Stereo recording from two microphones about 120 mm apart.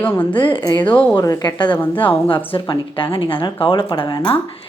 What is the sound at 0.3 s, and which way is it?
A woman's voice, 45° left (ahead or behind).